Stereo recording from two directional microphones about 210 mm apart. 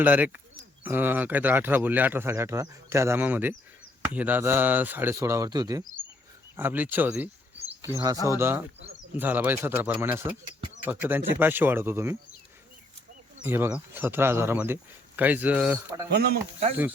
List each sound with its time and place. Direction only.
0.0 s speech: 5° right (ahead or behind)
13.4 s speech: 10° right (ahead or behind)